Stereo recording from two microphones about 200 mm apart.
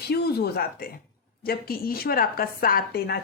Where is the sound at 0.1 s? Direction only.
55° left (ahead or behind).